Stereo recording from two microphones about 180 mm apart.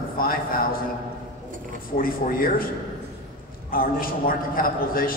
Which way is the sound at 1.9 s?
50° left (ahead or behind).